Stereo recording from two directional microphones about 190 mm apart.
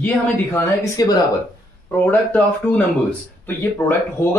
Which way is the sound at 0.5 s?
15° left (ahead or behind).